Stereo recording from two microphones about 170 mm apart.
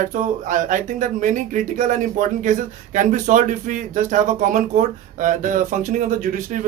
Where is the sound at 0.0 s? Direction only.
50° right (ahead or behind).